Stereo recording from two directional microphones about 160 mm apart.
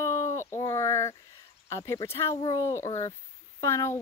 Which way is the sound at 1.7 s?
20° left (ahead or behind).